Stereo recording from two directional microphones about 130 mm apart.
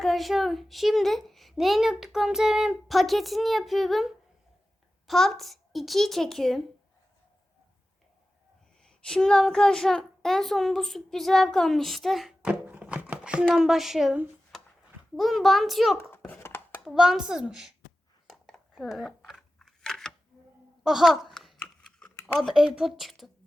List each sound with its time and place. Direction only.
0.0 s a child's voice: centre (ahead or behind)
8.8 s a child's voice: 5° left (ahead or behind)
14.5 s a sound: centre (ahead or behind)
15.1 s a child's voice: centre (ahead or behind)
16.0 s a sound: 15° left (ahead or behind)
16.8 s a child's voice: 5° right (ahead or behind)
18.3 s scissors: centre (ahead or behind)
20.8 s a sound: centre (ahead or behind)
22.4 s a child's voice: 5° right (ahead or behind)